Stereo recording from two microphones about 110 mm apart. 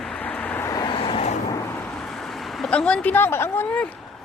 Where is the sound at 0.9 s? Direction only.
55° left (ahead or behind); by 1.4 s 70° left (ahead or behind).